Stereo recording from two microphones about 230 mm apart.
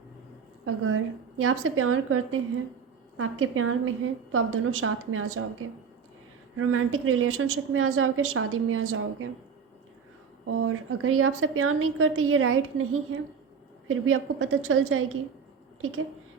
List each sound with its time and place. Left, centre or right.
0.6 s a woman's voice: right
6.6 s a woman's voice: right
10.4 s a woman's voice: right